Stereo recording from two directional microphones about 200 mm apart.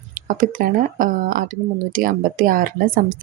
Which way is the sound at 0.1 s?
45° right (ahead or behind).